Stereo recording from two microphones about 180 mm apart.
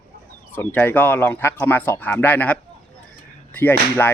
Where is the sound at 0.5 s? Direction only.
10° left (ahead or behind).